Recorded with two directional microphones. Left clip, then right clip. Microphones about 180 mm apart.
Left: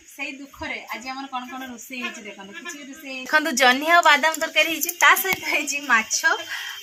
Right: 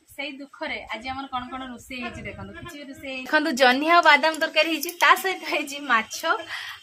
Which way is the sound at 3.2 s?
30° right (ahead or behind).